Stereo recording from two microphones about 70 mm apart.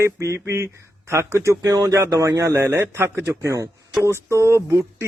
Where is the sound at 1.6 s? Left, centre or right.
Right.